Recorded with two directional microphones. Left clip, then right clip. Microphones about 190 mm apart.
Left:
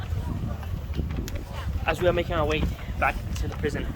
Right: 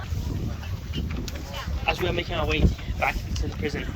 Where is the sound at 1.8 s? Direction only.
10° left (ahead or behind).